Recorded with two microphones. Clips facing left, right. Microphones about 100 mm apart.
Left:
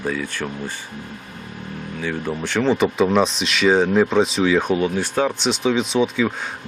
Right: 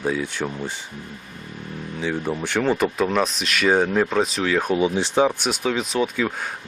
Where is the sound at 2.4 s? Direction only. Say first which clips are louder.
Left 4 dB; 10° right (ahead or behind).